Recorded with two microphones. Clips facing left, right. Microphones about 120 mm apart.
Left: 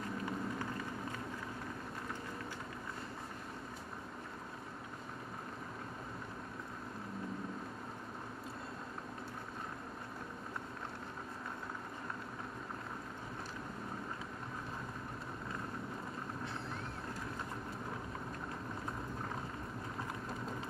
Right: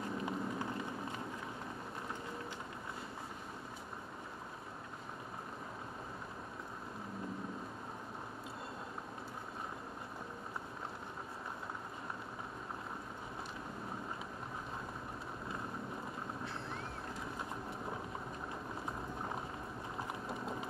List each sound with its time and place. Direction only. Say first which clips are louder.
0.2 s run: even; 20° right (ahead or behind)